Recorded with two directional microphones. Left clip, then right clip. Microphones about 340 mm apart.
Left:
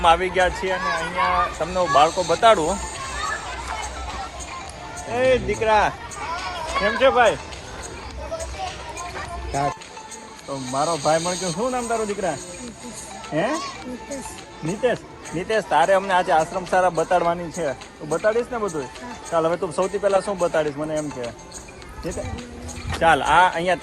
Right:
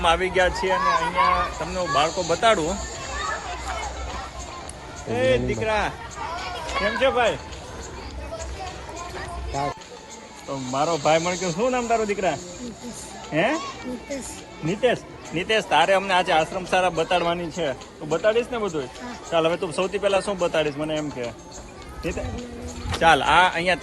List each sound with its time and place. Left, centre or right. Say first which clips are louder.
0.0 s speech: left 3 dB; centre
0.8 s speech: right 3 dB; right
1.3 s speech: left 2 dB; centre
5.1 s speech: left 2 dB; centre
10.5 s speech: left 1 dB; centre
15.4 s speech: even; centre
22.9 s speech: even; centre